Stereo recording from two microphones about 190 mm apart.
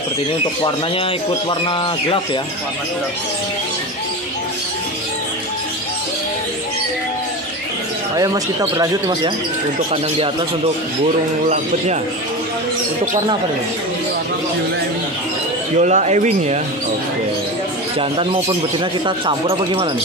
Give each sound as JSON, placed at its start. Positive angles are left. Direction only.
{"t": 1.5, "sound": "speech", "side_deg": 25}
{"t": 8.2, "sound": "speech", "side_deg": -20}
{"t": 11.4, "sound": "speech", "side_deg": -40}
{"t": 15.8, "sound": "speech", "side_deg": -35}
{"t": 17.9, "sound": "speech", "side_deg": -30}